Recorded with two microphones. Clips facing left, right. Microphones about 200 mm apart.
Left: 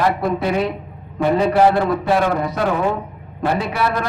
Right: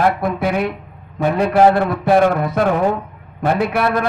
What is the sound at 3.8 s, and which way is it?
Speech, 55° right (ahead or behind).